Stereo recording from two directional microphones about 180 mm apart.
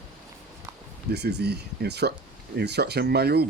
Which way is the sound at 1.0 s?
65° right (ahead or behind).